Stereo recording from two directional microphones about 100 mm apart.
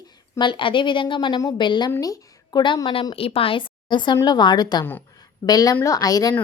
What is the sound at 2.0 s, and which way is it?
Speech, 35° left (ahead or behind).